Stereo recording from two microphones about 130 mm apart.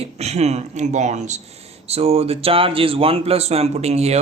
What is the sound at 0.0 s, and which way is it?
Speech, 55° right (ahead or behind).